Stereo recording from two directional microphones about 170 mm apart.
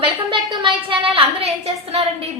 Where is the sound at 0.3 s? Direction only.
30° right (ahead or behind).